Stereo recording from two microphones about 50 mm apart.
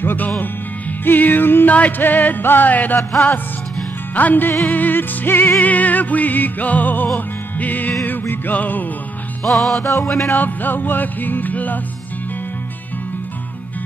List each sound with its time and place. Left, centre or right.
0.0 s speech: left
1.0 s music: left
1.7 s music: left
3.0 s music: centre
4.1 s music: left
9.4 s music: centre
10.3 s music: left